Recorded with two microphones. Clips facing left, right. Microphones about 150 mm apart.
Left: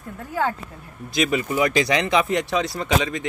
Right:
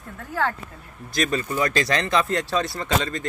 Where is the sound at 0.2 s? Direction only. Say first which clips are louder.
Left 1 dB; 10° left (ahead or behind).